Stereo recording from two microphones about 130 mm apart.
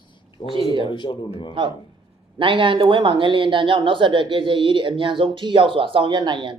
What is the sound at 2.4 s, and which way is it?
Speech, 40° right (ahead or behind).